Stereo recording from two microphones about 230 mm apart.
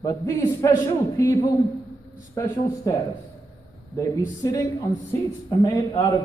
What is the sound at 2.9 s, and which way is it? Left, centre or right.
A man's voice, centre.